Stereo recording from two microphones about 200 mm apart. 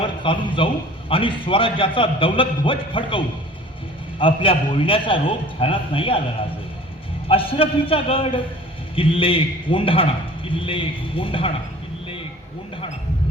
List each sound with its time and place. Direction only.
0.0 s a man's voice: 25° left (ahead or behind)
7.3 s a man's voice: 25° left (ahead or behind)